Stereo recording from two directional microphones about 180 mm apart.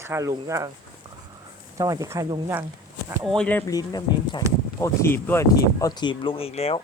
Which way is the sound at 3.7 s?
20° left (ahead or behind).